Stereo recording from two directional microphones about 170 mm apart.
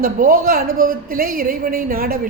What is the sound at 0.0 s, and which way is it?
A woman's voice, 55° right (ahead or behind).